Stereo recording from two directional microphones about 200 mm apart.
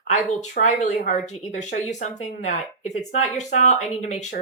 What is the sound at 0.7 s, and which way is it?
Speech, 35° left (ahead or behind).